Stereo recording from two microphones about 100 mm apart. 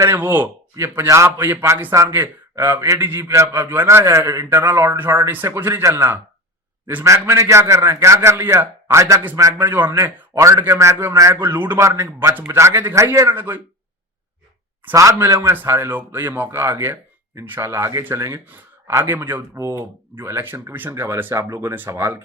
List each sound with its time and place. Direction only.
0.0 s a man's voice: 25° right (ahead or behind)
11.3 s a man's voice: 20° right (ahead or behind)
14.9 s a man's voice: 30° right (ahead or behind)